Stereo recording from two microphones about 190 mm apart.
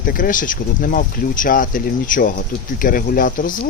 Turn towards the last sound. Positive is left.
turn(degrees=45)  # may be behind; listen again after turning